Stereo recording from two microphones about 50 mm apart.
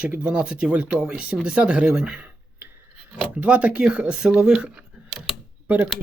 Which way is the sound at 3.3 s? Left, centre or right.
Right.